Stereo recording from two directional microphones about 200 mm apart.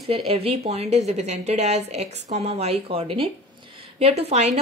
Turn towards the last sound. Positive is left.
turn(degrees=-35)  # may be behind; listen again after turning